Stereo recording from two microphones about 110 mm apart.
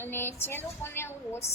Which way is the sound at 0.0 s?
20° left (ahead or behind).